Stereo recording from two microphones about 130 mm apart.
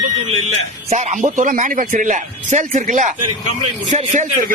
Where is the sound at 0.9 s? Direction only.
65° right (ahead or behind).